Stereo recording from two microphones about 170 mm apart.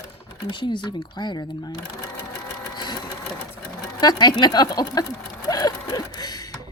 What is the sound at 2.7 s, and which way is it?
Sewing machine, 25° left (ahead or behind).